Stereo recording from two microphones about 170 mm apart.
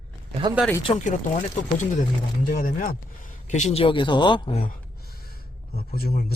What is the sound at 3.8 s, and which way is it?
Speech, 30° left (ahead or behind).